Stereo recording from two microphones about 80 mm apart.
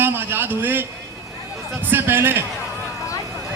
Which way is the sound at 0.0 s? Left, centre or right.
Right.